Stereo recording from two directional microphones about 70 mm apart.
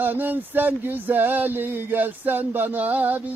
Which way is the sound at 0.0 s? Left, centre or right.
Right.